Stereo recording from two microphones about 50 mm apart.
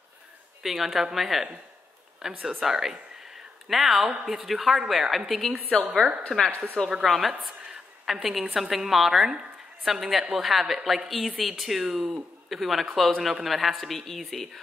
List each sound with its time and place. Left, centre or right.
0.6 s a man's voice: centre
5.7 s a woman's voice: centre
7.0 s a man's voice: centre